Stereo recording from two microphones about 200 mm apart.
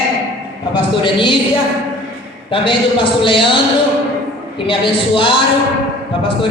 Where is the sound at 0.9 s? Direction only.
25° left (ahead or behind).